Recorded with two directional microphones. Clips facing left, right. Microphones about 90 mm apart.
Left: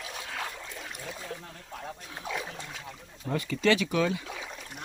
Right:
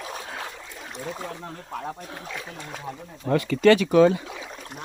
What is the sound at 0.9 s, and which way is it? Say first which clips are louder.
Speech: right 11 dB; 40° right (ahead or behind).